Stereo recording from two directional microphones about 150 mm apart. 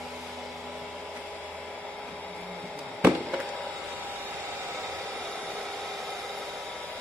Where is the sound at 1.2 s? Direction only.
10° left (ahead or behind).